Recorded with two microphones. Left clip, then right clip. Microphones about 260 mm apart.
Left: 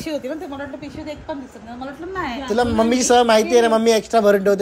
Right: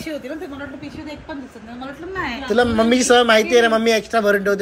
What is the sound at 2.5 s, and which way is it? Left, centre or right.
A man's voice, centre.